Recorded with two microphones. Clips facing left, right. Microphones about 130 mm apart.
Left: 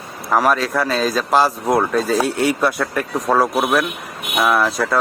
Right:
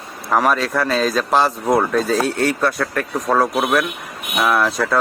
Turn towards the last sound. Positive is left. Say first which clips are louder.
# even
turn(degrees=0)  # may be behind; listen again after turning